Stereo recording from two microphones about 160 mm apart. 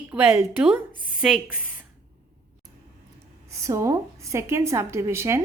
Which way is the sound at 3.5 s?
20° right (ahead or behind).